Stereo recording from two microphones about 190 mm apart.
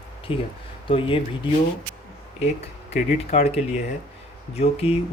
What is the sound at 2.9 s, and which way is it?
Speech, 35° left (ahead or behind).